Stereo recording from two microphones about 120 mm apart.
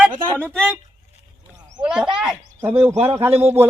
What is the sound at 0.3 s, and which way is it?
Speech, 10° left (ahead or behind).